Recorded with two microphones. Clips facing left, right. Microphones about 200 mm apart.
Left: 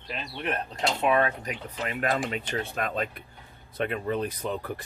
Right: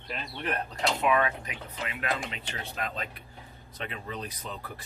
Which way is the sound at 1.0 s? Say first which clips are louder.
Left 3 dB; 35° left (ahead or behind).